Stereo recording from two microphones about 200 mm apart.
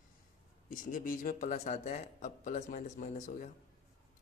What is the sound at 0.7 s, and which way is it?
Speech, 40° left (ahead or behind).